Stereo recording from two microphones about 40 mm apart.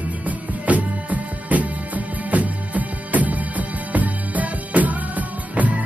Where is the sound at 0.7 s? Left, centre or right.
Right.